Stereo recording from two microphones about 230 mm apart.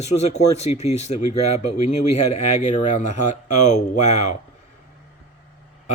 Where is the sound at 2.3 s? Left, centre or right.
Left.